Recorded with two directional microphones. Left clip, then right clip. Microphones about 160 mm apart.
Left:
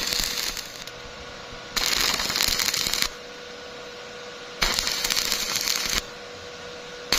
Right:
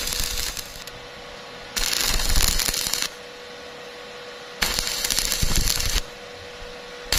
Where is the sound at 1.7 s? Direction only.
15° left (ahead or behind).